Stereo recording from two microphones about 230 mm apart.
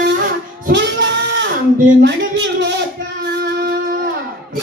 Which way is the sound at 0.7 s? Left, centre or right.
Right.